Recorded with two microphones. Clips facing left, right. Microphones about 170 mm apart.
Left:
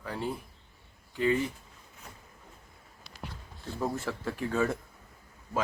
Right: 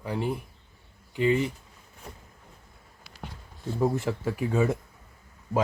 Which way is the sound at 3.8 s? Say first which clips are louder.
Right 6 dB; 15° right (ahead or behind).